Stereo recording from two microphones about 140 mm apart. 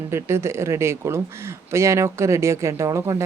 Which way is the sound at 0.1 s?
20° right (ahead or behind).